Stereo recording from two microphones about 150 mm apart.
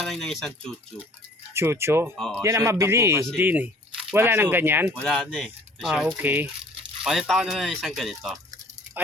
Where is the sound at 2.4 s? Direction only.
20° right (ahead or behind).